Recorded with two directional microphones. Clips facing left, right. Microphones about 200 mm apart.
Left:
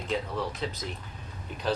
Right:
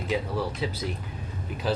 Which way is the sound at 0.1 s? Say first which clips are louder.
Right 3 dB; 5° right (ahead or behind).